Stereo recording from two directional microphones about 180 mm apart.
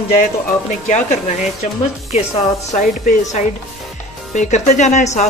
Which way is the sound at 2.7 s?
40° left (ahead or behind).